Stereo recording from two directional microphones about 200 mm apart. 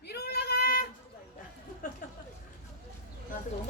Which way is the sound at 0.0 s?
55° left (ahead or behind).